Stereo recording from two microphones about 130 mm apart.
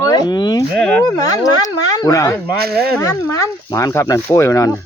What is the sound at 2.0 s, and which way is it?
Speech, 25° left (ahead or behind).